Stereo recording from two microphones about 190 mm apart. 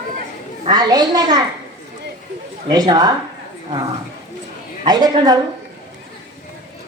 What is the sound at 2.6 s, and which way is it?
Speech, 20° right (ahead or behind).